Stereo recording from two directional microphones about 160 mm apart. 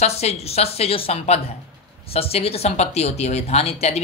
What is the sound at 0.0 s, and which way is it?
Speech, 40° left (ahead or behind).